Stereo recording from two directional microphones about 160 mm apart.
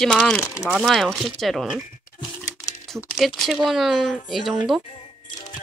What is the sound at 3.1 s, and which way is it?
Speech, centre (ahead or behind).